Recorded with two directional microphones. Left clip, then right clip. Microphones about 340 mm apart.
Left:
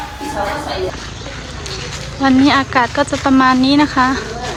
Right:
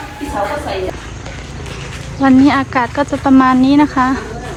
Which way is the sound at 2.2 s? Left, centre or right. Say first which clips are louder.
Right 1 dB; centre.